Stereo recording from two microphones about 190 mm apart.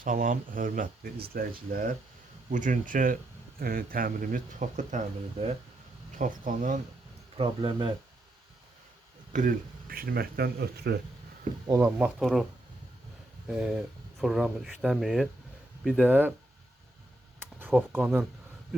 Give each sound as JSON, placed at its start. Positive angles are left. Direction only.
{"t": 0.0, "sound": "speech", "side_deg": -45}
{"t": 7.3, "sound": "speech", "side_deg": -25}
{"t": 9.3, "sound": "speech", "side_deg": -45}
{"t": 11.6, "sound": "speech", "side_deg": -15}
{"t": 13.5, "sound": "speech", "side_deg": -5}
{"t": 17.4, "sound": "a sound", "side_deg": -10}